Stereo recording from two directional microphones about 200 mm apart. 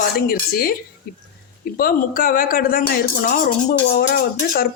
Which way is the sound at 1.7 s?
45° left (ahead or behind).